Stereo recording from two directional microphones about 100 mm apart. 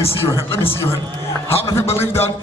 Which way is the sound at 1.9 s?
25° left (ahead or behind).